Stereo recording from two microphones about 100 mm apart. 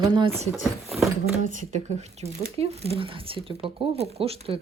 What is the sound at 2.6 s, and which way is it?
Speech, 80° right.